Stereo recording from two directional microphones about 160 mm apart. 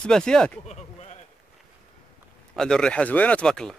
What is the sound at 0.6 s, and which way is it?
Speech, 45° left (ahead or behind).